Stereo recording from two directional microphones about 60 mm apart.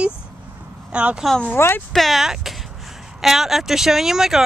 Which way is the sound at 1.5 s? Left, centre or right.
Left.